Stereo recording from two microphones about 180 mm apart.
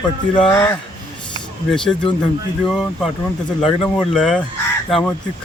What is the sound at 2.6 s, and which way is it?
Speech, centre (ahead or behind).